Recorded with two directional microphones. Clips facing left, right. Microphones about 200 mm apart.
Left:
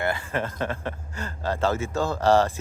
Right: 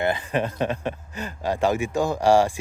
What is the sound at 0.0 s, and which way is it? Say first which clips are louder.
Speech: right 3 dB; 20° right (ahead or behind).